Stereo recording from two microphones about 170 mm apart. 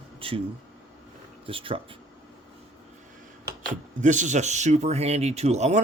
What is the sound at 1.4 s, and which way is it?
Speech, 30° right (ahead or behind).